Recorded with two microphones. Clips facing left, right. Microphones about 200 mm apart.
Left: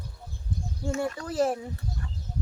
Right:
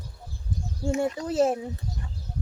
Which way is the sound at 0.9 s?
20° right (ahead or behind).